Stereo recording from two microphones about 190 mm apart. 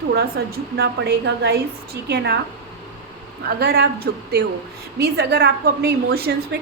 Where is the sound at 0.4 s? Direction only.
60° right (ahead or behind).